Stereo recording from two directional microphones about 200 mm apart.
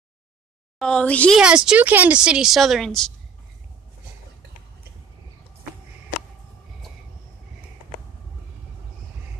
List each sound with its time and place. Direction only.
0.7 s speech: 5° left (ahead or behind)
1.4 s speech: 5° right (ahead or behind)